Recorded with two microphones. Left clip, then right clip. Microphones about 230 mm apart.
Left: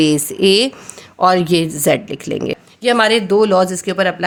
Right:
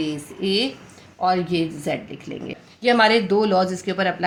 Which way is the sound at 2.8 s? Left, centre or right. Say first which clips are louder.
Left 3 dB; left.